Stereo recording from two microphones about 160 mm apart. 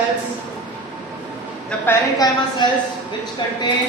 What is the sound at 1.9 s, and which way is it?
Speech, 25° left (ahead or behind).